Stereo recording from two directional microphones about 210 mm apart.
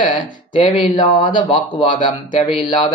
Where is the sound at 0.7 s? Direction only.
25° left (ahead or behind).